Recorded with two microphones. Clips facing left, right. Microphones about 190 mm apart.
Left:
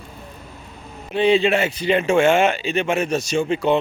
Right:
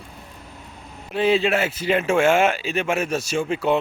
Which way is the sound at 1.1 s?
5° right (ahead or behind).